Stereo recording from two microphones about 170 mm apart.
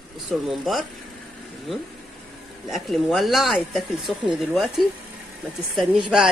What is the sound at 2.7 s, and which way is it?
Speech, centre (ahead or behind).